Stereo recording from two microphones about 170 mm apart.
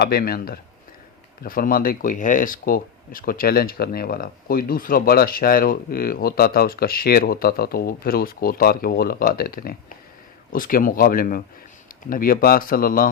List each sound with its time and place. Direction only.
0.0 s speech: 65° left (ahead or behind)